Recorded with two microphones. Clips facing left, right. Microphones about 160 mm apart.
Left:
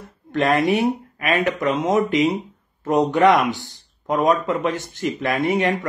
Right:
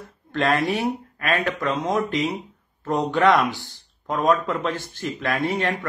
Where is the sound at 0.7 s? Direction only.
15° left (ahead or behind).